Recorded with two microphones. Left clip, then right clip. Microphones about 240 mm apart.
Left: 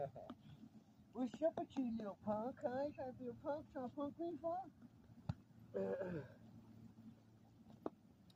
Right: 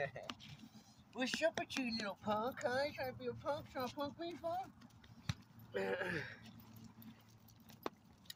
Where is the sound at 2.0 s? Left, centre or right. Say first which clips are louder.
Right 6 dB; right.